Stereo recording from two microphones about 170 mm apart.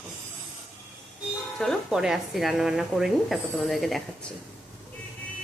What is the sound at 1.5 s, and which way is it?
Speech, centre (ahead or behind).